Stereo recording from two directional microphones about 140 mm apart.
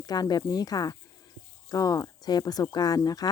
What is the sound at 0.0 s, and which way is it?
Speech, 30° left (ahead or behind).